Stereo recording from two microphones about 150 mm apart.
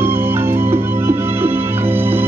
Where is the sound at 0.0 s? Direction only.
15° right (ahead or behind).